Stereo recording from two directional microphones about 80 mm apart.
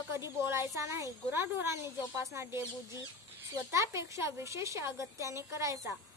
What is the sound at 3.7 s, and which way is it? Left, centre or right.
A woman's voice, right.